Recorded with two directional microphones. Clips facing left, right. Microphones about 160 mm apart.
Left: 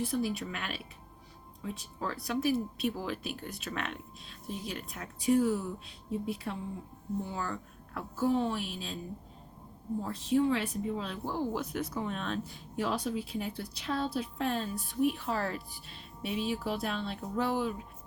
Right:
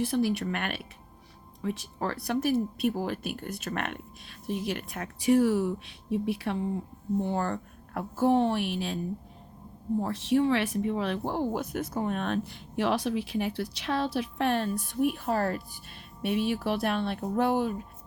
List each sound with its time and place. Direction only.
0.0 s speech: 80° right
3.0 s speech: 50° right (ahead or behind); by 6.6 s 80° right
7.3 s speech: 60° right (ahead or behind)
10.0 s speech: 75° right (ahead or behind); by 15.6 s 50° right (ahead or behind)
16.2 s speech: 65° right (ahead or behind)